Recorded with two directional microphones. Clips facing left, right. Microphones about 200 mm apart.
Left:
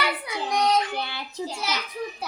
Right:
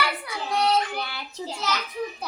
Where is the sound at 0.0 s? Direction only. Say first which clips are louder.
Left 1 dB; 20° left (ahead or behind).